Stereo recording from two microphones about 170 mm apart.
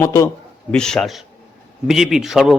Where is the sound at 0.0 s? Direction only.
15° left (ahead or behind).